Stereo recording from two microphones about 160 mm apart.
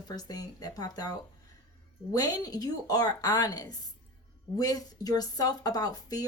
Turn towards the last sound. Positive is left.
turn(degrees=25)  # may be behind; listen again after turning